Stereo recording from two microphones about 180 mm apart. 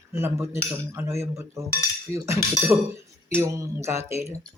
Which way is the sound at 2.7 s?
15° right (ahead or behind).